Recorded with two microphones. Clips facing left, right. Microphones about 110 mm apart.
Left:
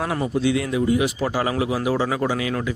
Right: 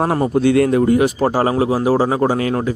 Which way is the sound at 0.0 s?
45° right (ahead or behind).